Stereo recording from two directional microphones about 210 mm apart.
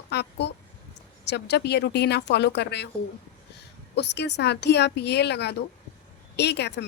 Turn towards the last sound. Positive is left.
turn(degrees=55)  # may be behind; listen again after turning